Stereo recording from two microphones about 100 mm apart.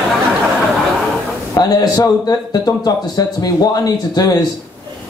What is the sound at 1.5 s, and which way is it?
A man's voice, 40° left (ahead or behind).